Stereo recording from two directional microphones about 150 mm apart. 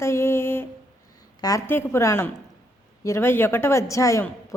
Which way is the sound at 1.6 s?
15° left (ahead or behind).